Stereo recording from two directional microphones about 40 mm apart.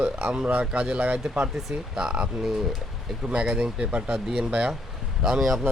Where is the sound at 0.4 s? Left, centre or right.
Right.